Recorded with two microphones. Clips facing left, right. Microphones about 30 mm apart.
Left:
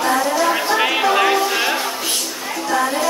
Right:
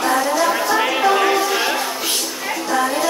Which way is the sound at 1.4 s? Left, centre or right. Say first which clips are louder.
Even; centre.